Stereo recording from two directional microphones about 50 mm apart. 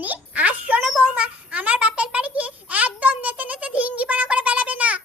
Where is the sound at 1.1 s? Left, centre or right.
Right.